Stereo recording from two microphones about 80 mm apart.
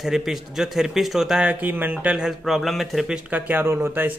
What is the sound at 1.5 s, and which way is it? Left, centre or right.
Speech, right.